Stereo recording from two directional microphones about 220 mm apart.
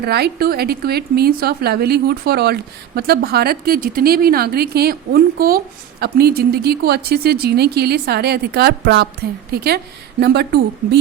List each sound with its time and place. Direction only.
0.0 s a woman's voice: 45° right (ahead or behind)